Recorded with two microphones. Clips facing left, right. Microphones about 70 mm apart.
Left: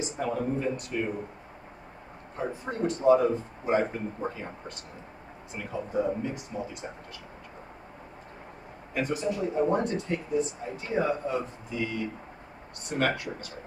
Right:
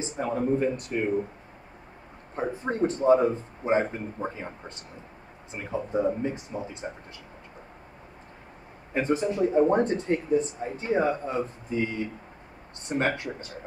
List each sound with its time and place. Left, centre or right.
0.0 s speech: right
2.3 s speech: right
5.5 s speech: right
8.9 s speech: right